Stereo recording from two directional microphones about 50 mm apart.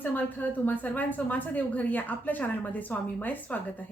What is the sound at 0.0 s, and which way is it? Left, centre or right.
A woman's voice, left.